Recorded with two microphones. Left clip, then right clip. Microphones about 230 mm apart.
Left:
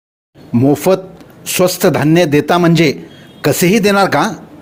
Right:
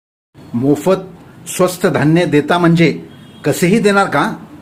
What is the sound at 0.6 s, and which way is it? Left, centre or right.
A man's voice, left.